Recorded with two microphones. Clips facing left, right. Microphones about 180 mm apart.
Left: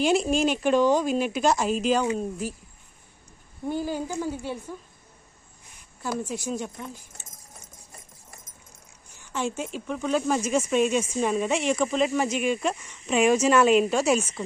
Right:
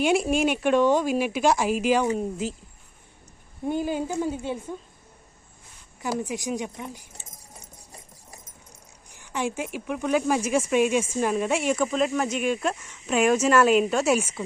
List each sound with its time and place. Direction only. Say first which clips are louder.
0.0 s speech: even; 5° right (ahead or behind)
3.6 s a woman's voice: right 2 dB; 20° right (ahead or behind)
6.0 s speech: right 2 dB; 15° right (ahead or behind)
9.0 s speech: right 1 dB; 15° right (ahead or behind)